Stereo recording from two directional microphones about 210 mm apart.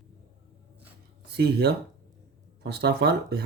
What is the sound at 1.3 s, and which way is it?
Speech, 50° right (ahead or behind).